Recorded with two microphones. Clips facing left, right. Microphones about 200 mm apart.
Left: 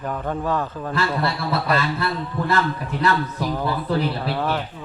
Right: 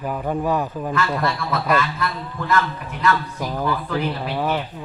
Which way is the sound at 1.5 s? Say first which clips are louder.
Right 1 dB; 35° left (ahead or behind).